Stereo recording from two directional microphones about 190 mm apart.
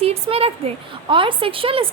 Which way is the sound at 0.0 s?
30° right (ahead or behind).